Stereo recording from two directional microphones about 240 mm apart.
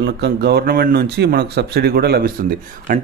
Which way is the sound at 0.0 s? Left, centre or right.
Right.